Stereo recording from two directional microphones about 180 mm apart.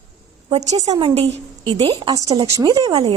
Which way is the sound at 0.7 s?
20° right (ahead or behind).